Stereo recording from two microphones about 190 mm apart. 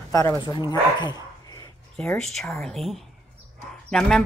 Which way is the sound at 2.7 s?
Centre (ahead or behind).